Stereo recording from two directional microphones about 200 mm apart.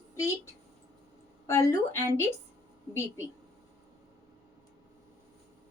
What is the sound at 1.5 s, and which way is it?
Speech, 15° left (ahead or behind).